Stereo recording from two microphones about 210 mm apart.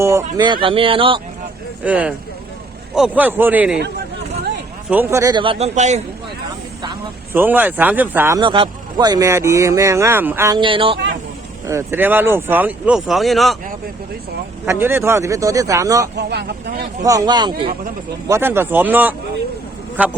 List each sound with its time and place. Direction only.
0.0 s speech: 15° right (ahead or behind)
1.8 s speech: 5° right (ahead or behind)
4.9 s speech: 10° right (ahead or behind); by 6.0 s 35° right (ahead or behind)
7.3 s speech: 10° right (ahead or behind)
8.4 s speech: 25° right (ahead or behind)
11.6 s speech: 15° right (ahead or behind)
14.7 s speech: 10° right (ahead or behind)
16.1 s speech: 50° right (ahead or behind)
17.0 s speech: 15° right (ahead or behind)